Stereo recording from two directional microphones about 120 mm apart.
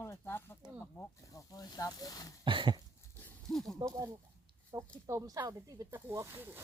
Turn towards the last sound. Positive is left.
turn(degrees=-20)  # may be behind; listen again after turning